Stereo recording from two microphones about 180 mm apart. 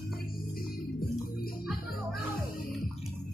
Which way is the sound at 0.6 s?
55° left (ahead or behind).